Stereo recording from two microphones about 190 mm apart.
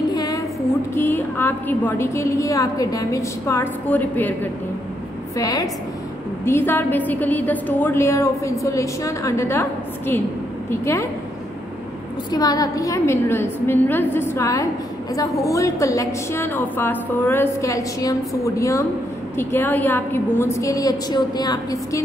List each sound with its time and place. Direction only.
0.1 s a sound: 20° left (ahead or behind)
0.9 s a woman's voice: 10° left (ahead or behind)
12.3 s a woman's voice: 20° left (ahead or behind)